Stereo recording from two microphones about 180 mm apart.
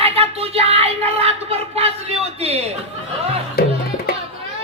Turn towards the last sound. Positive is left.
turn(degrees=60)  # may be behind; listen again after turning